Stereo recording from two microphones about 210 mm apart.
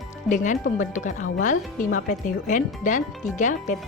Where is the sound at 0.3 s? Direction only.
35° left (ahead or behind).